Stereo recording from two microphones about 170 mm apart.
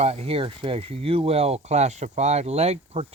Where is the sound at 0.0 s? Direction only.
35° right (ahead or behind).